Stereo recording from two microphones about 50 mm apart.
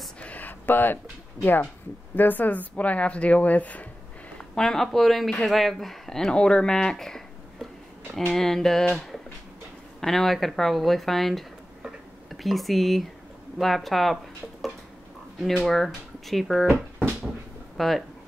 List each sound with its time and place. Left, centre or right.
0.2 s a sound: left
1.4 s a woman's voice: left
4.6 s speech: centre
8.3 s speech: centre
17.7 s speech: centre